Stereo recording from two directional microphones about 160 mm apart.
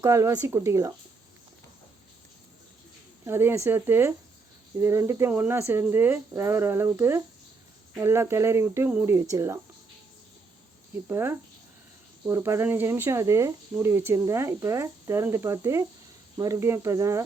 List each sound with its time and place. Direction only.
0.0 s speech: 20° right (ahead or behind)
3.2 s speech: 15° right (ahead or behind)
11.1 s speech: 15° right (ahead or behind)